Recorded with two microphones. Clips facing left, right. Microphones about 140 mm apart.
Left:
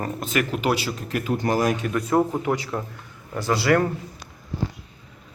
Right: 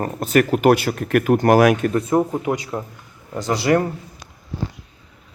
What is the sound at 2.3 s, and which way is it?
Speech, 15° right (ahead or behind).